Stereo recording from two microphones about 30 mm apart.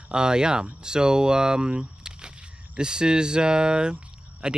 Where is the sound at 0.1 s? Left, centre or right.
Right.